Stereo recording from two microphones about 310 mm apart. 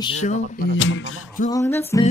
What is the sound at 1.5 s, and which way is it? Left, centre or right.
Music, centre.